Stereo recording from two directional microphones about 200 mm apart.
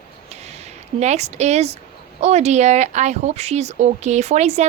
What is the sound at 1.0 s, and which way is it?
Speech, 35° right (ahead or behind).